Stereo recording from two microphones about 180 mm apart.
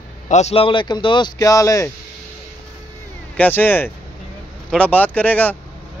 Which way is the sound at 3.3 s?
10° left (ahead or behind).